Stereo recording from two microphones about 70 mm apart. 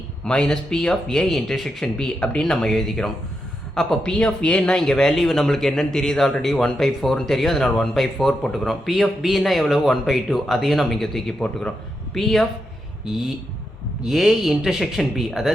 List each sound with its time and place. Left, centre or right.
0.3 s speech: centre
14.0 s speech: centre